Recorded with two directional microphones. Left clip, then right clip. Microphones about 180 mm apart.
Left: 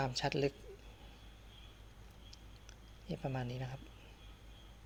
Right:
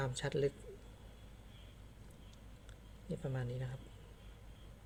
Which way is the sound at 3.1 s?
10° left (ahead or behind).